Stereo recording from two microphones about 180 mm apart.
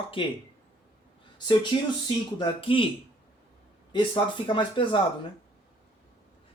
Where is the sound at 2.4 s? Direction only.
30° left (ahead or behind).